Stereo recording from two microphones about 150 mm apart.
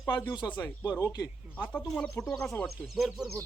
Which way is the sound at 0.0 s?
25° left (ahead or behind).